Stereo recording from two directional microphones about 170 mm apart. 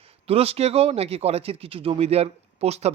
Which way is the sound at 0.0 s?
35° right (ahead or behind).